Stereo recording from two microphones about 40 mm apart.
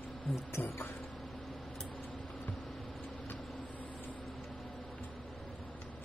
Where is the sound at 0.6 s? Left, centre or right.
Left.